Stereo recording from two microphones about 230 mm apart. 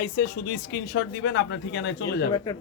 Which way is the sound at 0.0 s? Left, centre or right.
Left.